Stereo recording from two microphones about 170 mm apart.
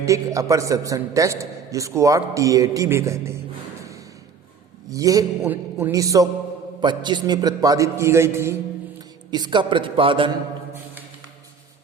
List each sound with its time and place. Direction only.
0.0 s a man's voice: 20° right (ahead or behind)
4.9 s a man's voice: 20° right (ahead or behind)